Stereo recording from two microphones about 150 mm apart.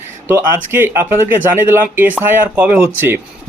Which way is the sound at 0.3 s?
15° right (ahead or behind).